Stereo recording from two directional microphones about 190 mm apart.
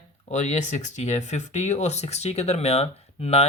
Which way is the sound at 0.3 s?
40° left (ahead or behind).